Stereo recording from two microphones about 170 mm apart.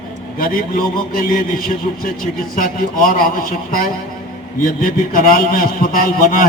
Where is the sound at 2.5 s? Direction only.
55° left (ahead or behind).